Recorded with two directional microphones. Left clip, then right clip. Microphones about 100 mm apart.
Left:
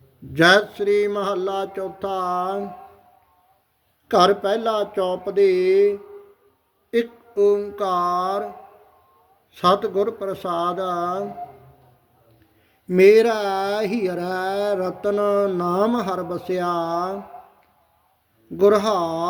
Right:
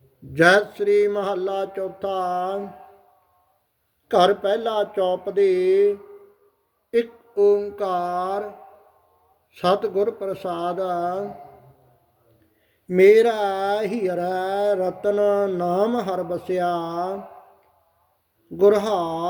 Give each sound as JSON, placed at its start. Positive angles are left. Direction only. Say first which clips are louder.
{"t": 0.3, "sound": "mantra", "louder": "left 1 dB", "side_deg": 25}
{"t": 4.1, "sound": "speech", "louder": "left 1 dB", "side_deg": 30}
{"t": 6.9, "sound": "mantra", "louder": "even", "side_deg": 25}
{"t": 9.6, "sound": "mantra", "louder": "left 2 dB", "side_deg": 30}
{"t": 12.9, "sound": "speech", "louder": "left 1 dB", "side_deg": 35}
{"t": 18.5, "sound": "mantra", "louder": "left 1 dB", "side_deg": 30}